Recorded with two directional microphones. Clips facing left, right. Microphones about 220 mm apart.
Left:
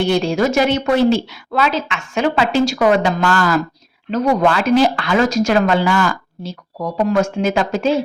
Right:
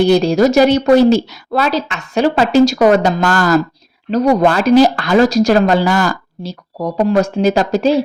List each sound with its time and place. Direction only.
0.0 s speech: 40° right (ahead or behind)